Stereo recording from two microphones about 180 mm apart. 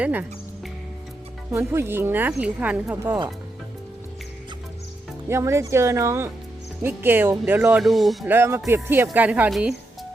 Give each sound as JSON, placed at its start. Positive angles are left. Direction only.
{"t": 0.0, "sound": "music", "side_deg": -10}
{"t": 1.5, "sound": "speech", "side_deg": -15}
{"t": 5.3, "sound": "speech", "side_deg": -15}
{"t": 8.3, "sound": "speech", "side_deg": -15}